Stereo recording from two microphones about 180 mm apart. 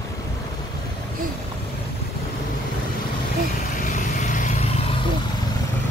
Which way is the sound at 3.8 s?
45° left (ahead or behind).